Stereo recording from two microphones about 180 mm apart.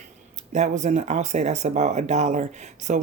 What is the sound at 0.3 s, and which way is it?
A woman's voice, 40° right (ahead or behind).